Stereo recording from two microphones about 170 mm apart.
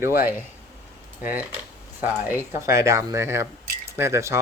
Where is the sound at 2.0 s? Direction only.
10° right (ahead or behind).